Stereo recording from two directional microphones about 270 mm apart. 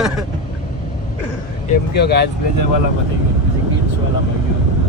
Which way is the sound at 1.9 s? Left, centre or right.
Left.